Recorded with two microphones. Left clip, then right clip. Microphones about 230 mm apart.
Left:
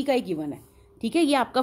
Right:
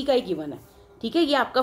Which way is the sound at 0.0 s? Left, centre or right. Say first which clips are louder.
Right 2 dB; left.